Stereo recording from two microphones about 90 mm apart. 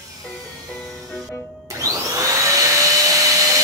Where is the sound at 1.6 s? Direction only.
35° right (ahead or behind).